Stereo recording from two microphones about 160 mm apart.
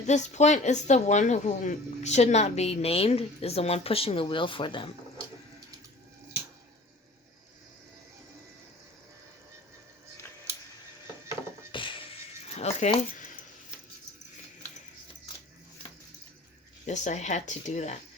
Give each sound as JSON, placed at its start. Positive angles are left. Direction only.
{"t": 0.0, "sound": "speech", "side_deg": 45}
{"t": 11.7, "sound": "music", "side_deg": 30}
{"t": 12.5, "sound": "rattle", "side_deg": 40}
{"t": 16.8, "sound": "speech", "side_deg": 50}